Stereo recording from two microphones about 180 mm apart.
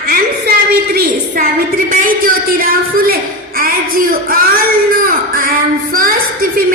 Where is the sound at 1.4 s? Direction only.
55° right (ahead or behind).